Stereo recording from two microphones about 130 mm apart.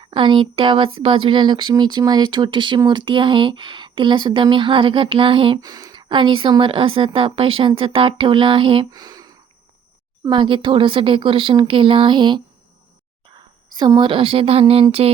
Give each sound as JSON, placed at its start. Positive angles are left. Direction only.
{"t": 0.0, "sound": "speech", "side_deg": -40}
{"t": 5.5, "sound": "speech", "side_deg": -25}
{"t": 9.0, "sound": "a sound", "side_deg": -30}
{"t": 10.2, "sound": "a woman's voice", "side_deg": -40}